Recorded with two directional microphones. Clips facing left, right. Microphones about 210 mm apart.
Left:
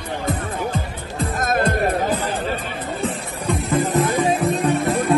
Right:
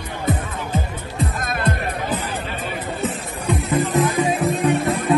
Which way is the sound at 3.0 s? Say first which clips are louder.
Even; 5° right (ahead or behind).